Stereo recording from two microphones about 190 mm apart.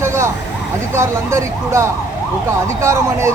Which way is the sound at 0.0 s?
15° right (ahead or behind).